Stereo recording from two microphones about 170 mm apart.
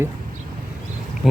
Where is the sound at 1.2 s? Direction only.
5° left (ahead or behind).